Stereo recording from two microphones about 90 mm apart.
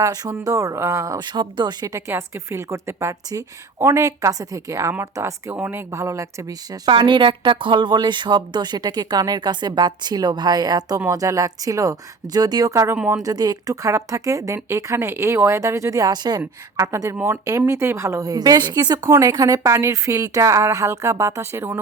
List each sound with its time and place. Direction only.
0.0 s speech: 45° right (ahead or behind)
1.2 s speech: 55° right (ahead or behind)
1.9 s speech: 35° right (ahead or behind)
4.9 s speech: 30° right (ahead or behind)
5.5 s speech: 15° right (ahead or behind)
5.9 s speech: 35° right (ahead or behind)
6.9 s a woman's voice: 65° right (ahead or behind)
16.7 s speech: 35° right (ahead or behind)